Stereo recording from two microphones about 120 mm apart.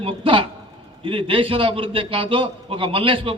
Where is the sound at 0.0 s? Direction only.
45° right (ahead or behind).